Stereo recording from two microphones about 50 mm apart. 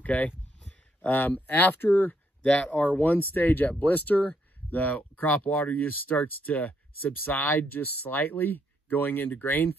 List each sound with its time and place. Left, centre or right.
0.0 s speech: left
2.4 s speech: left